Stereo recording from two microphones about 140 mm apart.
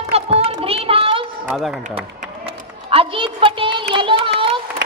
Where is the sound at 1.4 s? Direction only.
10° right (ahead or behind).